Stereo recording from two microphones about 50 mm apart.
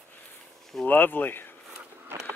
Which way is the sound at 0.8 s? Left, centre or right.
Left.